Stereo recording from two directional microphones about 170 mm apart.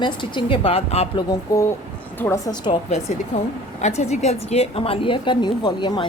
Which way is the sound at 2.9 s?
40° left (ahead or behind).